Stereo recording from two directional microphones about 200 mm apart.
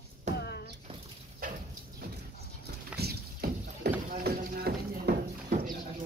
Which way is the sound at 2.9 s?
50° right (ahead or behind).